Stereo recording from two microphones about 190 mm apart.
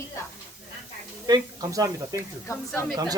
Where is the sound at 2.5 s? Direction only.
15° left (ahead or behind).